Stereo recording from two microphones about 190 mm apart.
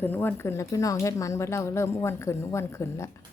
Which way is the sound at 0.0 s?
10° left (ahead or behind).